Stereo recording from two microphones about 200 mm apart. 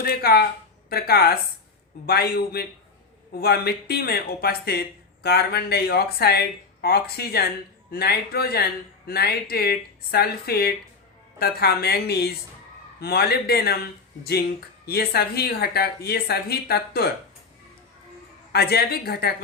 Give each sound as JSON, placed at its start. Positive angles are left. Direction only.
{"t": 0.0, "sound": "speech", "side_deg": 50}
{"t": 14.8, "sound": "speech", "side_deg": 50}
{"t": 18.5, "sound": "speech", "side_deg": 50}